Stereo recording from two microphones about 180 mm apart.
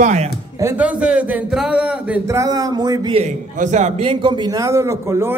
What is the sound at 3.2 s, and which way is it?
A man's voice, 40° right (ahead or behind).